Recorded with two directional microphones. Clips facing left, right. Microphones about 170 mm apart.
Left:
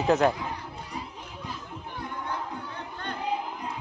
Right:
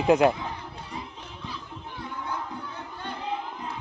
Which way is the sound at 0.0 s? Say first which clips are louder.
Right 3 dB; 10° right (ahead or behind).